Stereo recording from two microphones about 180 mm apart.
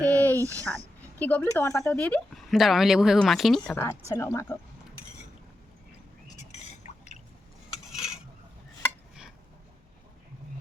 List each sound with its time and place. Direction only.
0.1 s a sound: 10° left (ahead or behind)
0.5 s speech: 10° left (ahead or behind)
4.1 s speech: 15° left (ahead or behind)
6.8 s drip: 40° left (ahead or behind)
7.9 s stir: 5° right (ahead or behind)